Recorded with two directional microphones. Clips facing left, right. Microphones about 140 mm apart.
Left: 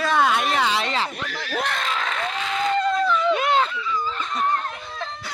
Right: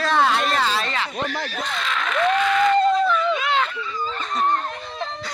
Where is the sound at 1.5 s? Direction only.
70° left (ahead or behind).